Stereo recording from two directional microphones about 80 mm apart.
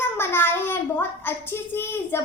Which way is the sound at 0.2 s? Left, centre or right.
Left.